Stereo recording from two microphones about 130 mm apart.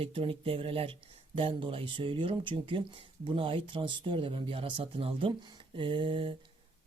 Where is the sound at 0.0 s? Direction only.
45° right (ahead or behind).